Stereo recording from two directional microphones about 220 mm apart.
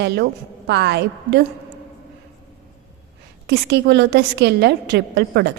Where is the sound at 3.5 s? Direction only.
50° right (ahead or behind).